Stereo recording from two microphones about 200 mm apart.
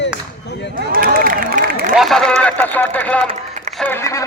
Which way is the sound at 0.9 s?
45° right (ahead or behind).